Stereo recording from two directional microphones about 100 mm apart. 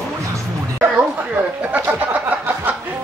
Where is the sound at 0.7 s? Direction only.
15° right (ahead or behind).